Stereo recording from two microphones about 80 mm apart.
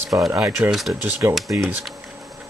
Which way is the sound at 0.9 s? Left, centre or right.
Right.